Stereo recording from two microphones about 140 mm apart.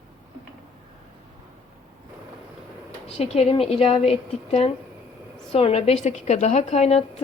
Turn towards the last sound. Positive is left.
turn(degrees=50)  # may be behind; listen again after turning